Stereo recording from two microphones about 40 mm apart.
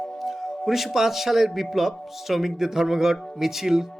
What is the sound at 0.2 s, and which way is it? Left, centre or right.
Music, centre.